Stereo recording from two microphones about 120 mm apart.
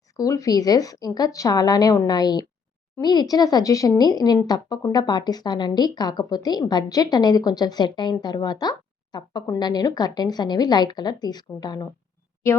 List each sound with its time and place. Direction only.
0.2 s a woman's voice: 30° left (ahead or behind)